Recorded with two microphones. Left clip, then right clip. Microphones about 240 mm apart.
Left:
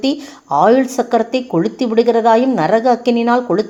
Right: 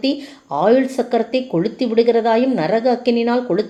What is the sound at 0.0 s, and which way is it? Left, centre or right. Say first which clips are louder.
A woman's voice: left 2 dB; left.